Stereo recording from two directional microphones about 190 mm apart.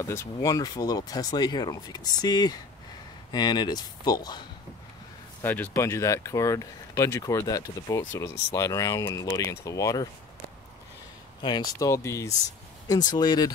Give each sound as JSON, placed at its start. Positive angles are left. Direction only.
{"t": 0.0, "sound": "speech", "side_deg": 15}
{"t": 5.4, "sound": "speech", "side_deg": 10}
{"t": 11.4, "sound": "speech", "side_deg": 20}